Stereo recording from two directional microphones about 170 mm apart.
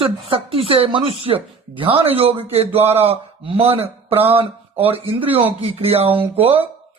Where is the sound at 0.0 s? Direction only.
35° right (ahead or behind).